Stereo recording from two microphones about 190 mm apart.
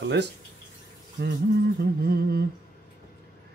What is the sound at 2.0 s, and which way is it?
Speech, 55° right (ahead or behind).